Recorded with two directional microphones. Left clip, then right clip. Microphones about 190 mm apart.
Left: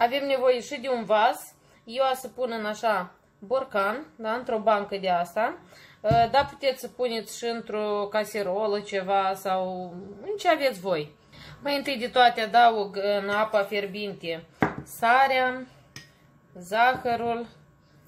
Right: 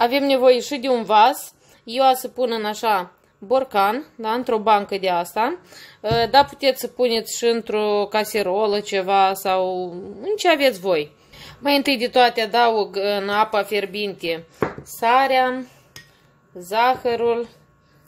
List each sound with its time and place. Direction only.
0.0 s a woman's voice: 40° right (ahead or behind)
16.6 s a woman's voice: 45° right (ahead or behind)